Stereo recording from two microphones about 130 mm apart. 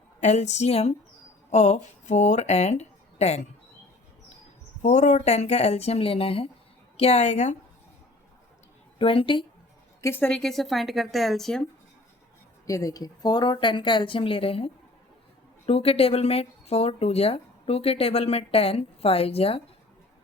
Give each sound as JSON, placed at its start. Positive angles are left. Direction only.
{"t": 0.2, "sound": "speech", "side_deg": 60}
{"t": 4.8, "sound": "speech", "side_deg": 70}
{"t": 9.0, "sound": "speech", "side_deg": 45}
{"t": 10.0, "sound": "speech", "side_deg": 15}
{"t": 12.6, "sound": "speech", "side_deg": 25}